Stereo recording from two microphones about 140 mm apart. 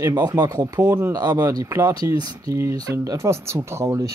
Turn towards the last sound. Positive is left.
turn(degrees=-20)  # may be behind; listen again after turning